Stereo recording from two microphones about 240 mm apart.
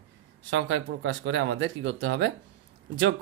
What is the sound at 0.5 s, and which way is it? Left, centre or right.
Speech, right.